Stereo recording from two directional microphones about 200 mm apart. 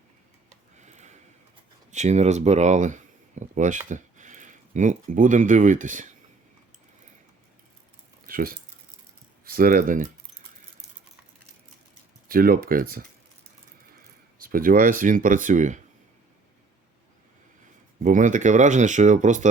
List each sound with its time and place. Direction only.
0.8 s a sound: 35° right (ahead or behind)
1.9 s speech: 35° right (ahead or behind)
8.3 s speech: 45° right (ahead or behind)
12.3 s speech: 45° right (ahead or behind)
14.5 s speech: 45° right (ahead or behind)
18.0 s speech: 40° right (ahead or behind)